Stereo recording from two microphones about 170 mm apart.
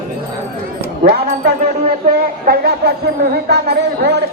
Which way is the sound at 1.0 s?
70° right (ahead or behind).